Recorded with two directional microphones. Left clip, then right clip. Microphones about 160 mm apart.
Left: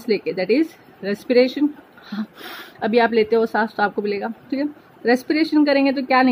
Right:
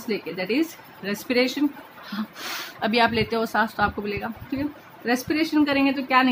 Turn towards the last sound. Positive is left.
turn(degrees=20)  # may be behind; listen again after turning